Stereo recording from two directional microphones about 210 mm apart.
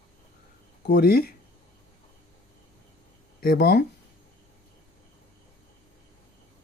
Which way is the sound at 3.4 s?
50° left (ahead or behind).